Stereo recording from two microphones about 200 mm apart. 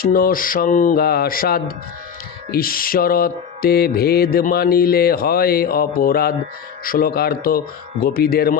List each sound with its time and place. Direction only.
0.0 s mantra: 45° left (ahead or behind)